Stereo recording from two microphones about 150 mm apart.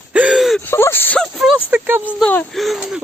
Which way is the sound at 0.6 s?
15° left (ahead or behind).